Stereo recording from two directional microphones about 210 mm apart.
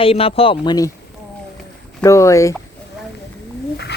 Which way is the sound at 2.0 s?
15° left (ahead or behind).